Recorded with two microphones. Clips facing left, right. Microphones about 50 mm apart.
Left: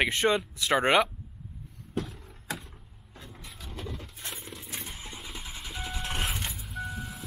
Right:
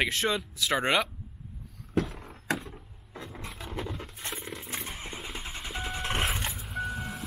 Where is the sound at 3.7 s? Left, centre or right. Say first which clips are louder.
Right 3 dB; right.